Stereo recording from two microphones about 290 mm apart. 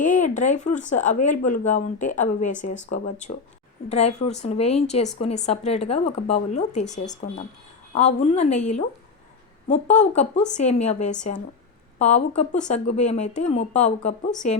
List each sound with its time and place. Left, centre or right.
0.0 s speech: left